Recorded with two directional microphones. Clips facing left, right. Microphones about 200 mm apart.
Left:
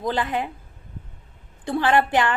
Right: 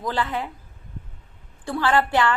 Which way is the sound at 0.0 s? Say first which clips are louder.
Left 2 dB; 20° left (ahead or behind).